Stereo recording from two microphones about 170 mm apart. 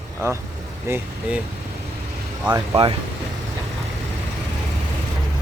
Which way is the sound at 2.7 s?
35° right (ahead or behind).